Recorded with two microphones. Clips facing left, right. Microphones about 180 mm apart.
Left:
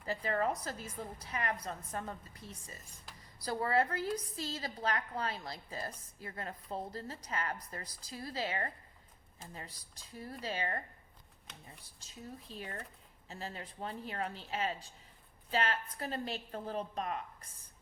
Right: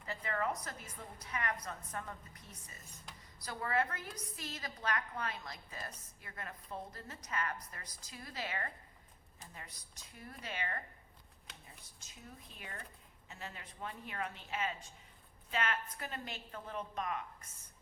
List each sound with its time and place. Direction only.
0.0 s a woman's voice: 35° left (ahead or behind)